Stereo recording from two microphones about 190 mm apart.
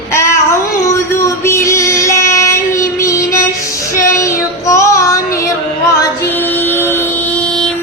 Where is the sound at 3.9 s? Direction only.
15° left (ahead or behind).